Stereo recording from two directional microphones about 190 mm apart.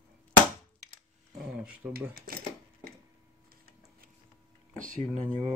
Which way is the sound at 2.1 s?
50° right (ahead or behind).